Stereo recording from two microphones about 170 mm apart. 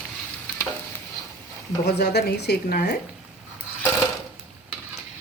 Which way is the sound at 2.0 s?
75° left (ahead or behind).